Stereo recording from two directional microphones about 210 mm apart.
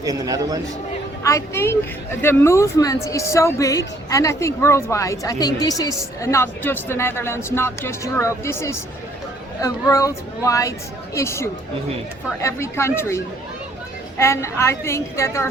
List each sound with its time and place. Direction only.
0.0 s a man's voice: 15° right (ahead or behind)
1.2 s speech: 15° left (ahead or behind)